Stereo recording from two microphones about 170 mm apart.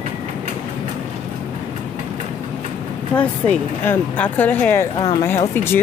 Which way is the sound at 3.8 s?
10° left (ahead or behind).